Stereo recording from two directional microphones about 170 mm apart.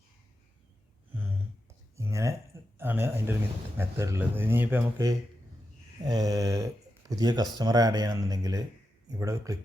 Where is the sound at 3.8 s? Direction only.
15° right (ahead or behind).